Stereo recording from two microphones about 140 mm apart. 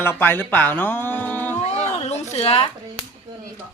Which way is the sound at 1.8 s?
50° left (ahead or behind).